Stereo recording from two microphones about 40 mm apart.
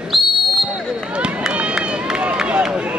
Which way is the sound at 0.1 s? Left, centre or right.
Centre.